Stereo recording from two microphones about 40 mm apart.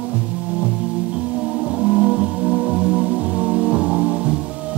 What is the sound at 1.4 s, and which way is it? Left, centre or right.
Music, centre.